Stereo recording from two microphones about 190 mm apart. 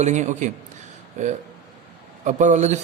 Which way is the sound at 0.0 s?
40° right (ahead or behind).